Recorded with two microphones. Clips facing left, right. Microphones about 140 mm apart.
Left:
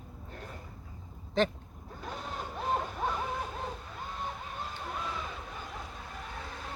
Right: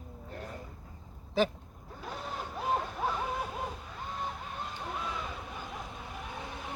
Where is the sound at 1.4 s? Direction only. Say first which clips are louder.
Even; 5° right (ahead or behind).